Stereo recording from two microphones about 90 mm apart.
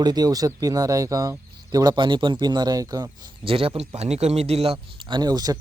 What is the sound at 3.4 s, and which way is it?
Speech, 90° right.